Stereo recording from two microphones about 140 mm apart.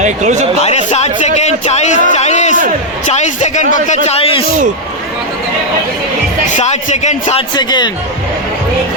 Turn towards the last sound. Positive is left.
turn(degrees=30)  # may be behind; listen again after turning